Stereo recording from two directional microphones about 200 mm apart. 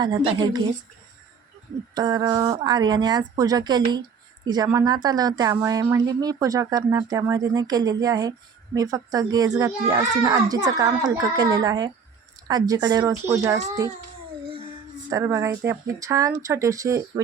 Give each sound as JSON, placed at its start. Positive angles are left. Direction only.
{"t": 0.0, "sound": "speech", "side_deg": -20}
{"t": 2.0, "sound": "speech", "side_deg": -20}
{"t": 15.1, "sound": "speech", "side_deg": -15}